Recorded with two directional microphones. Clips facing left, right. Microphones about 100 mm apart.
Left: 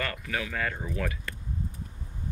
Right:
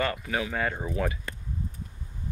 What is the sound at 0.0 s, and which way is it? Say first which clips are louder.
Speech: right 4 dB; 25° right (ahead or behind).